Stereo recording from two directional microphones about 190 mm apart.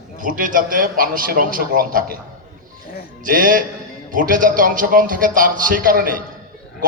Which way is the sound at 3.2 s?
45° right (ahead or behind).